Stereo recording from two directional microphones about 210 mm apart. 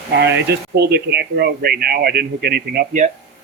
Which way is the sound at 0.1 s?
55° right (ahead or behind).